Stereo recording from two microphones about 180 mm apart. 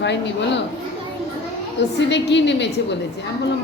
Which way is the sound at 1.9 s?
75° left (ahead or behind).